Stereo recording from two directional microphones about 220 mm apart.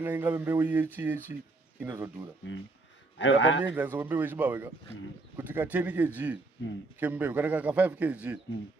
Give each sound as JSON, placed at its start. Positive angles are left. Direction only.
{"t": 0.0, "sound": "speech", "side_deg": -10}
{"t": 2.5, "sound": "a man's voice", "side_deg": 55}
{"t": 3.6, "sound": "speech", "side_deg": -10}